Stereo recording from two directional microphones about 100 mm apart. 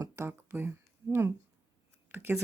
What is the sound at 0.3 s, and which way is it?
Speech, 20° right (ahead or behind).